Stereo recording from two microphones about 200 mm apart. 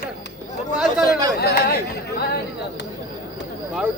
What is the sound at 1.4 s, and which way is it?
Speech, 55° left (ahead or behind).